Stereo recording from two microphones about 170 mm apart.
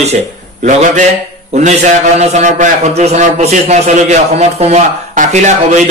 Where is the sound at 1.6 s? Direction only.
45° right (ahead or behind).